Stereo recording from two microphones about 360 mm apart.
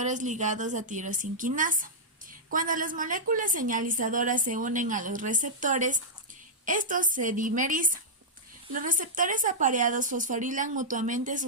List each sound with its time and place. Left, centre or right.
0.0 s a woman's voice: centre